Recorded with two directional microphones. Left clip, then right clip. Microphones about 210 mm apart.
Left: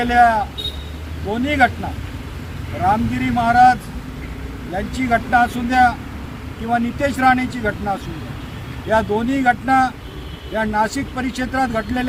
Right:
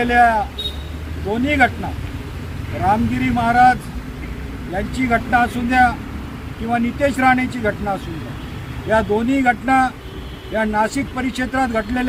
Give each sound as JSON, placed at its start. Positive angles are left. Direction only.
{"t": 0.0, "sound": "speech", "side_deg": 10}
{"t": 2.9, "sound": "speech", "side_deg": 15}